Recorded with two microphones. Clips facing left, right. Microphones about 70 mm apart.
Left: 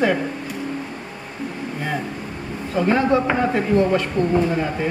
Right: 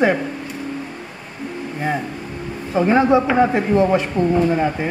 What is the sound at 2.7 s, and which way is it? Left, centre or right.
Speech, centre.